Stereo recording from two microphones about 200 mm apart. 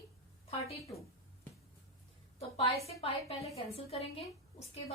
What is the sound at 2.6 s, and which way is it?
A woman's voice, 30° left (ahead or behind).